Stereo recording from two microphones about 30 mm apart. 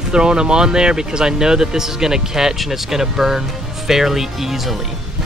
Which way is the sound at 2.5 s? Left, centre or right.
Centre.